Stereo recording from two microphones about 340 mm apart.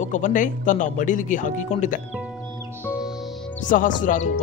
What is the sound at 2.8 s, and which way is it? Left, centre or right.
Music, centre.